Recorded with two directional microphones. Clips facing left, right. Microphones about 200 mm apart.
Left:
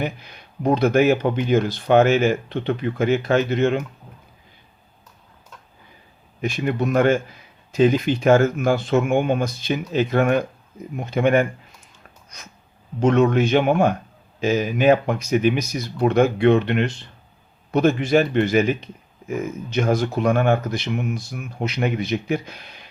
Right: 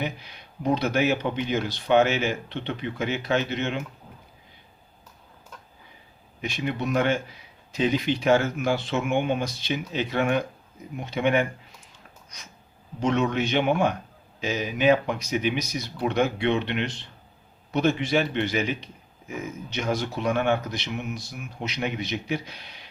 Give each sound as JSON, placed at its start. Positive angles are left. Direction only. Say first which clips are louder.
{"t": 0.0, "sound": "speech", "louder": "left 4 dB", "side_deg": 50}
{"t": 6.4, "sound": "speech", "louder": "left 6 dB", "side_deg": 50}
{"t": 13.0, "sound": "speech", "louder": "left 7 dB", "side_deg": 50}